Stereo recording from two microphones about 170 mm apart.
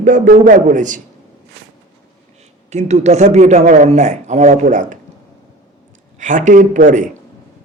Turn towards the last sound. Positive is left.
turn(degrees=-50)  # may be behind; listen again after turning